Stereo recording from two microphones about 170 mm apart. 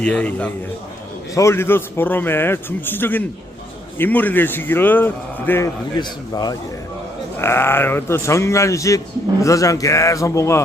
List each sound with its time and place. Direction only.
0.0 s a man's voice: 5° left (ahead or behind)